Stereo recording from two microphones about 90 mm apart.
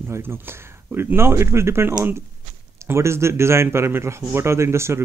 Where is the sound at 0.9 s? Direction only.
30° right (ahead or behind).